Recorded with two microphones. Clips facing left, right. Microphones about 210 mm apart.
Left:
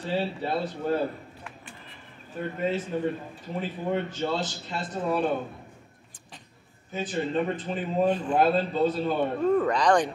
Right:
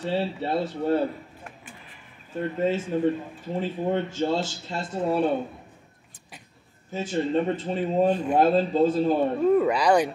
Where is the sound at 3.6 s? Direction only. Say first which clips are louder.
Right 3 dB; 30° right (ahead or behind).